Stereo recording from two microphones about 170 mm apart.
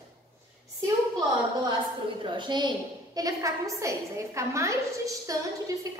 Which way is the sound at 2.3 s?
25° right (ahead or behind).